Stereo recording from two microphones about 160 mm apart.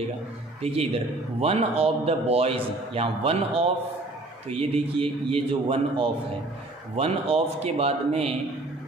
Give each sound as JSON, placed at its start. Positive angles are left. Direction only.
{"t": 0.6, "sound": "a man's voice", "side_deg": -35}